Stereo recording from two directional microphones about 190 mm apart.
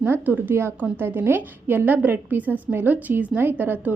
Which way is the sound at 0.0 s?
10° right (ahead or behind).